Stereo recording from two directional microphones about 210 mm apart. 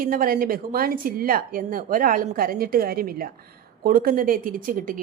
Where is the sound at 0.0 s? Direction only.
45° right (ahead or behind).